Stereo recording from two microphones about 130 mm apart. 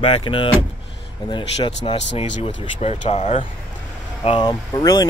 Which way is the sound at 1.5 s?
45° left (ahead or behind).